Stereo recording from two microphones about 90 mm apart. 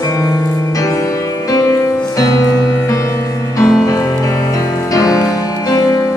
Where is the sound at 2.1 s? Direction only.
40° left (ahead or behind).